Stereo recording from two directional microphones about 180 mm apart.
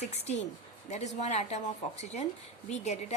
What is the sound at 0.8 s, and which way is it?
A woman's voice, 40° left (ahead or behind).